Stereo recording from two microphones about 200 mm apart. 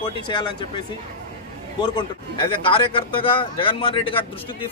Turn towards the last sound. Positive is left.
turn(degrees=25)  # may be behind; listen again after turning